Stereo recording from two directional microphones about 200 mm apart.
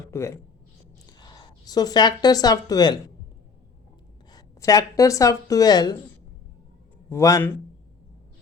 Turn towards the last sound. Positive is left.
turn(degrees=15)  # may be behind; listen again after turning